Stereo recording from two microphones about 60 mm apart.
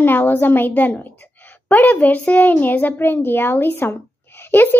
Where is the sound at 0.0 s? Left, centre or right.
Left.